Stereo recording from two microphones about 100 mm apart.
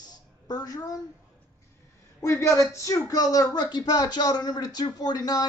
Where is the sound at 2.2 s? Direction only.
30° left (ahead or behind).